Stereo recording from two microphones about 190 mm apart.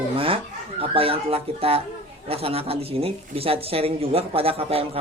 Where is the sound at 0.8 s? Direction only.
30° right (ahead or behind).